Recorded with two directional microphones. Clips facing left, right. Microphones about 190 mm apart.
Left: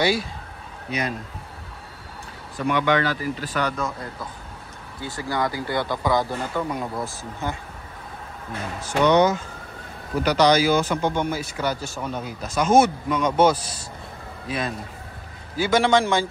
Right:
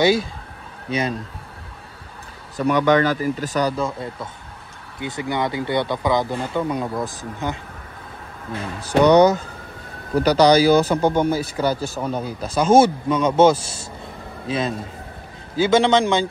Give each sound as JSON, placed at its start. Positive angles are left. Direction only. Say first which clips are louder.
{"t": 0.0, "sound": "speech", "louder": "right 5 dB", "side_deg": -25}
{"t": 2.6, "sound": "speech", "louder": "right 5 dB", "side_deg": -45}
{"t": 8.8, "sound": "speech", "louder": "right 5 dB", "side_deg": -35}
{"t": 15.5, "sound": "speech", "louder": "right 3 dB", "side_deg": -25}